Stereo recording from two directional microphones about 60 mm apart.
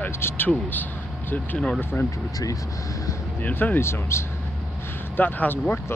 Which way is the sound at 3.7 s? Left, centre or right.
Left.